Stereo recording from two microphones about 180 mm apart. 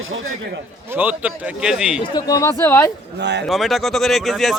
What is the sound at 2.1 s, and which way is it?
Speech, 20° left (ahead or behind).